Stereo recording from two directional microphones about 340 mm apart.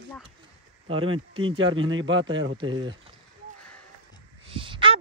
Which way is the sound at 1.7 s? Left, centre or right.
Right.